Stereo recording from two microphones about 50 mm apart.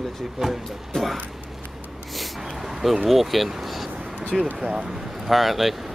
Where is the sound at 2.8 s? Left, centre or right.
Centre.